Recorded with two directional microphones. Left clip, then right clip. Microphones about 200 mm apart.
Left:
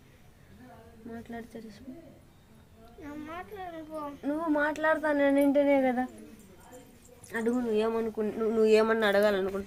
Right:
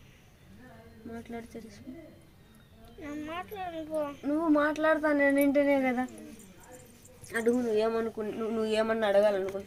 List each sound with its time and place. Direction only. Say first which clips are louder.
3.0 s a child's voice: right 3 dB; 15° right (ahead or behind)
4.2 s speech: right 1 dB; 10° left (ahead or behind)
7.3 s speech: right 2 dB; 5° left (ahead or behind)